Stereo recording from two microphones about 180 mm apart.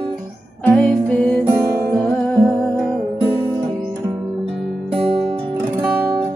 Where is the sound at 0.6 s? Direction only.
5° left (ahead or behind).